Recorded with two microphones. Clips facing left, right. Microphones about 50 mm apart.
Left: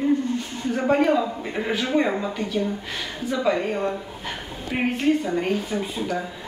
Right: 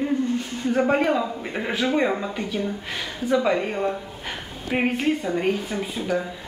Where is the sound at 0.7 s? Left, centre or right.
Centre.